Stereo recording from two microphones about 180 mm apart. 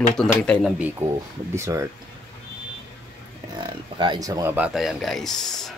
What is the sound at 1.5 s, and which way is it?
Speech, 15° right (ahead or behind).